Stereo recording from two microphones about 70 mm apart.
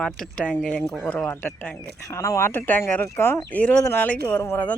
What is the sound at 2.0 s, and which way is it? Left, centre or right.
Speech, left.